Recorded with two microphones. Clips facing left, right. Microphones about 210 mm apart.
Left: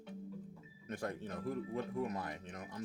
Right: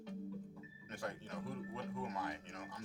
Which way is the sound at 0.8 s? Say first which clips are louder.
Left 4 dB; 40° left (ahead or behind).